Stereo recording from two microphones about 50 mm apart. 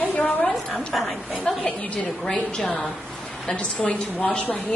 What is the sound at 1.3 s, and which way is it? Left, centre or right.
A woman's voice, left.